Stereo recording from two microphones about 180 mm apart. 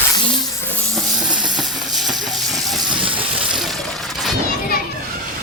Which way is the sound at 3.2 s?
5° right (ahead or behind).